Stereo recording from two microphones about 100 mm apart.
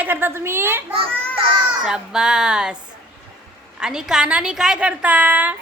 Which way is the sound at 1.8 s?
5° right (ahead or behind).